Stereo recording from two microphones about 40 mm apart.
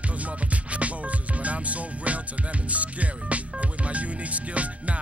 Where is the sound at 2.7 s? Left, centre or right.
Right.